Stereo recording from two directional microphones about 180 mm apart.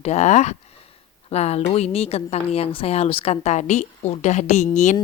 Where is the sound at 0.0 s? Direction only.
40° left (ahead or behind).